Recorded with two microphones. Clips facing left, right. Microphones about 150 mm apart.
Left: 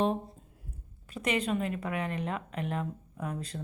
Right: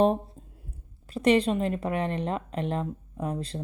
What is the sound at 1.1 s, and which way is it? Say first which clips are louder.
Speech: right 8 dB; 30° right (ahead or behind).